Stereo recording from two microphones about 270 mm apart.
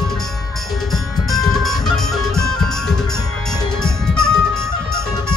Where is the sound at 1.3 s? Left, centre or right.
Centre.